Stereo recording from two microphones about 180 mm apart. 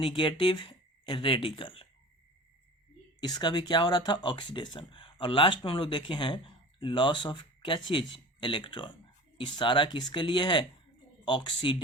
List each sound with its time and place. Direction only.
0.0 s speech: 30° left (ahead or behind)
3.2 s speech: 20° left (ahead or behind)